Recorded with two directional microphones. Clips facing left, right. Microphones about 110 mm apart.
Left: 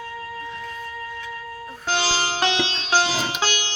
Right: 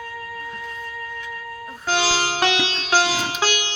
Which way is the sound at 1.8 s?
15° right (ahead or behind).